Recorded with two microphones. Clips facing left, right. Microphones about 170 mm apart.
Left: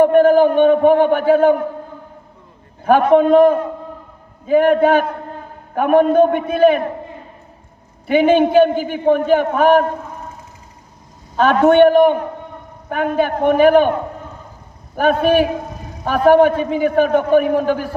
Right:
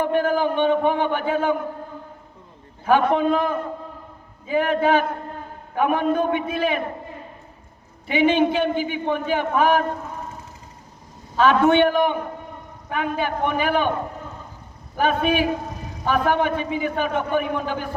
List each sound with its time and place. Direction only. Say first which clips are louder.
0.0 s a man's voice: left 10 dB; 50° left (ahead or behind)
2.8 s a man's voice: left 6 dB; 55° left (ahead or behind)
8.0 s a man's voice: left 6 dB; 50° left (ahead or behind)
11.3 s a man's voice: left 5 dB; 50° left (ahead or behind)